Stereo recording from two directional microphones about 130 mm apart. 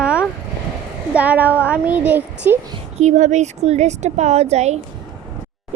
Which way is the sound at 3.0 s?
65° right (ahead or behind).